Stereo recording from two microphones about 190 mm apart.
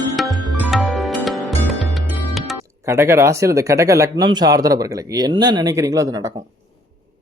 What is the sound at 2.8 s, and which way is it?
Speech, 15° right (ahead or behind).